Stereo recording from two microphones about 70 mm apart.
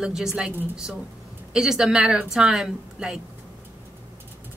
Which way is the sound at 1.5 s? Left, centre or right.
Centre.